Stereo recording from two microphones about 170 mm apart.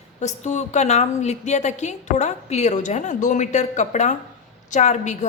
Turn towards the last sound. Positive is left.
turn(degrees=45)  # may be behind; listen again after turning